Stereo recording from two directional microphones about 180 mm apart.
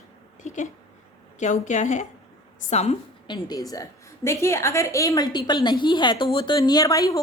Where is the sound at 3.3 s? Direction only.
20° left (ahead or behind).